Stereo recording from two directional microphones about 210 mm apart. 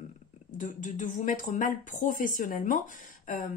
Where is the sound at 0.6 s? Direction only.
35° left (ahead or behind).